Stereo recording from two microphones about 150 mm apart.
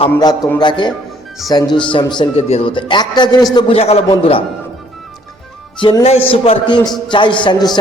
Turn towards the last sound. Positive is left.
turn(degrees=30)  # may be behind; listen again after turning